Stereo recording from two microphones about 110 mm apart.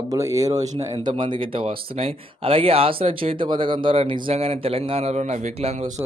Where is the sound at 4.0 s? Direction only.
60° right (ahead or behind); by 5.7 s 90° right.